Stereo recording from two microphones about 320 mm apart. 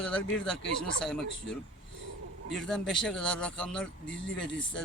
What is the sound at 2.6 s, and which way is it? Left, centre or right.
Speech, centre.